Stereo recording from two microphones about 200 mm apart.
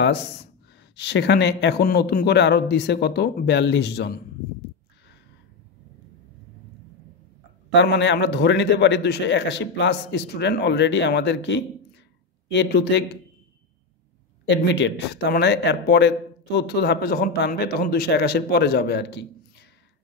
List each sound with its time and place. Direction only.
0.9 s speech: 60° left (ahead or behind)
7.7 s speech: 60° left (ahead or behind)
14.5 s speech: 60° left (ahead or behind)